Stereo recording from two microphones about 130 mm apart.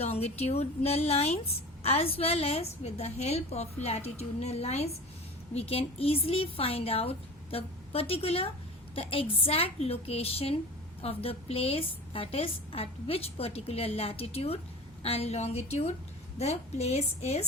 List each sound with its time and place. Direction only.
0.0 s a woman's voice: 50° left (ahead or behind)